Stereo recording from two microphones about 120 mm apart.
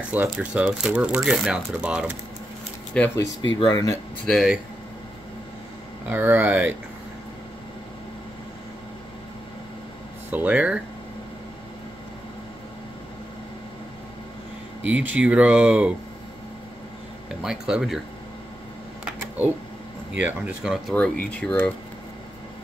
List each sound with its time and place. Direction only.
0.1 s speech: 10° right (ahead or behind)
2.9 s speech: 10° left (ahead or behind)
3.7 s speech: 25° left (ahead or behind)
4.3 s speech: centre (ahead or behind)
6.0 s speech: 15° right (ahead or behind)
10.3 s speech: 10° right (ahead or behind)
14.9 s speech: 10° right (ahead or behind)
17.4 s speech: 5° right (ahead or behind)
19.0 s a sound: 10° right (ahead or behind)
20.2 s speech: 10° right (ahead or behind)
20.9 s speech: 10° left (ahead or behind)